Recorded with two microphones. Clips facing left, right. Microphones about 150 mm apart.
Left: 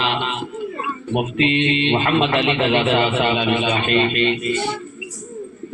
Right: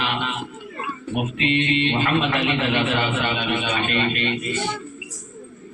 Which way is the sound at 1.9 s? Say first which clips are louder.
Left 4 dB; 35° left (ahead or behind).